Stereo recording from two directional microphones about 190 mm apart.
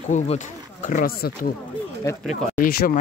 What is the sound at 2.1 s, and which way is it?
Speech, 15° left (ahead or behind).